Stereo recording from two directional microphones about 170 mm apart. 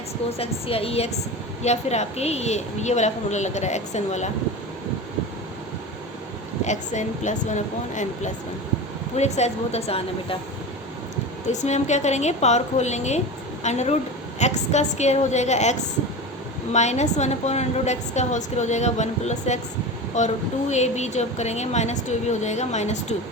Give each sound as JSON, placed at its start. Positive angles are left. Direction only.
{"t": 0.3, "sound": "a woman's voice", "side_deg": 35}
{"t": 6.7, "sound": "a woman's voice", "side_deg": 45}
{"t": 11.4, "sound": "a woman's voice", "side_deg": 45}
{"t": 16.7, "sound": "a woman's voice", "side_deg": 40}